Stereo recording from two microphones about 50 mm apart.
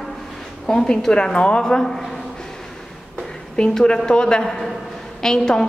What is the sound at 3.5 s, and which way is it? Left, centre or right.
A woman's voice, centre.